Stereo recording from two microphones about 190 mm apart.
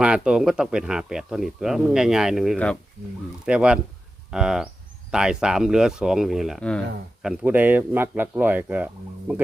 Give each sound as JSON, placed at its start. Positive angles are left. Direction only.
{"t": 0.0, "sound": "speech", "side_deg": -5}
{"t": 7.2, "sound": "speech", "side_deg": -5}